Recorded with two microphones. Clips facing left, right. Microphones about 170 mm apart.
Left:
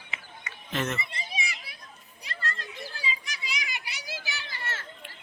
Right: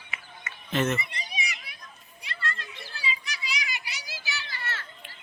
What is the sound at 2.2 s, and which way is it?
Children playing, 40° left (ahead or behind).